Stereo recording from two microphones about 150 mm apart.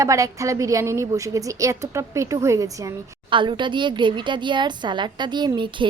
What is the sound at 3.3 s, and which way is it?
A woman's voice, 30° right (ahead or behind).